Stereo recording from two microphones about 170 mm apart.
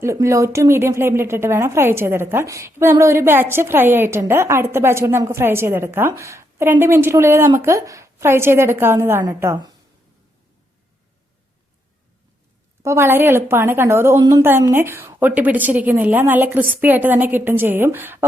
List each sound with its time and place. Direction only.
0.0 s a woman's voice: 15° right (ahead or behind)
12.8 s a woman's voice: 15° right (ahead or behind)